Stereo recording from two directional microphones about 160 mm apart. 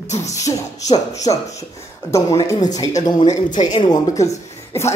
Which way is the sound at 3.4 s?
50° left (ahead or behind).